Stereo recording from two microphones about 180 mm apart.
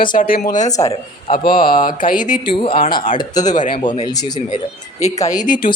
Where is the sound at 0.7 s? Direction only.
20° left (ahead or behind).